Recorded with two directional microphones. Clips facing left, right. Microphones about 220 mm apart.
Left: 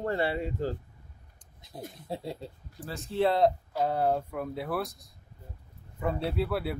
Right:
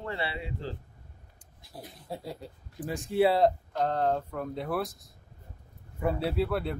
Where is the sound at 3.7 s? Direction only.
10° left (ahead or behind).